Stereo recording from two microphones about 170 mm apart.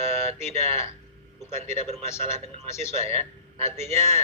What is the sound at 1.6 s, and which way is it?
Speech, 40° right (ahead or behind).